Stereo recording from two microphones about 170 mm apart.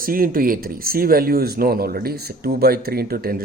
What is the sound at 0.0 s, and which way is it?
Speech, 55° right (ahead or behind).